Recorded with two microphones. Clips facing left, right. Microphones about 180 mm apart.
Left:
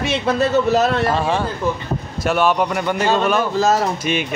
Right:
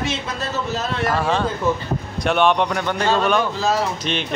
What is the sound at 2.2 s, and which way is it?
Speech, 5° left (ahead or behind).